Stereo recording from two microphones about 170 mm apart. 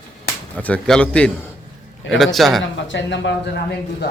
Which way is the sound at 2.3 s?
Centre (ahead or behind).